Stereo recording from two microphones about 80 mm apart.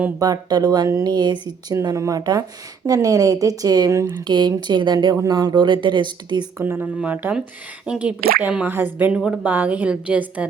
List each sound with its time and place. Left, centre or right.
0.2 s speech: right
4.2 s speech: right
5.1 s speech: right
6.6 s speech: right
9.1 s a woman's voice: centre